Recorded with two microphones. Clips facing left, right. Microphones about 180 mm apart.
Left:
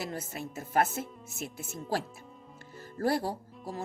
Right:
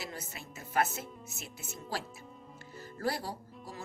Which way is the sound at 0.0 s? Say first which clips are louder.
Left 7 dB; 50° left (ahead or behind).